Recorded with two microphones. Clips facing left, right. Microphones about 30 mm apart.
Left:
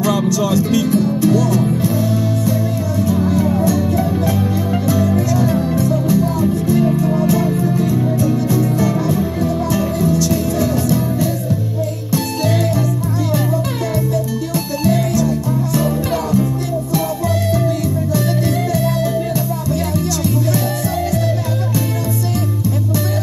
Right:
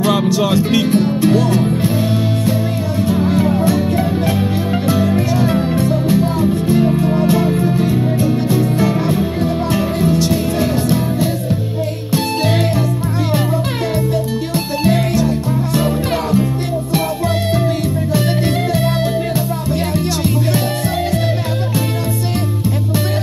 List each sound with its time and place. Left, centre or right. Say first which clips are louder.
0.0 s music: right 2 dB; right
3.1 s music: right 2 dB; right
6.7 s music: right 1 dB; right
7.0 s music: right 1 dB; right
14.5 s music: right 1 dB; right
18.7 s music: right 1 dB; right